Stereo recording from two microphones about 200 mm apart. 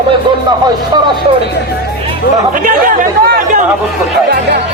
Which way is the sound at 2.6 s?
40° right (ahead or behind).